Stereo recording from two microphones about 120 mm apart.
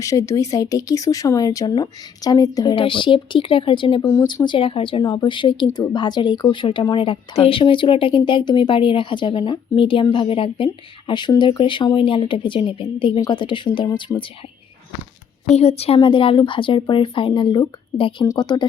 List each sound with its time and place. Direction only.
0.0 s speech: 25° left (ahead or behind)
2.7 s speech: 45° left (ahead or behind)
4.0 s speech: 25° left (ahead or behind)
4.4 s speech: 50° left (ahead or behind)
15.5 s a woman's voice: 60° left (ahead or behind)
16.0 s speech: 45° left (ahead or behind)